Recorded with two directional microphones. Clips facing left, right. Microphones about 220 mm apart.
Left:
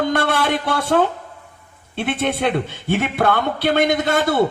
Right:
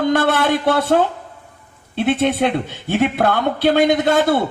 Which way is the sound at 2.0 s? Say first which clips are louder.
Right 5 dB; 50° right (ahead or behind).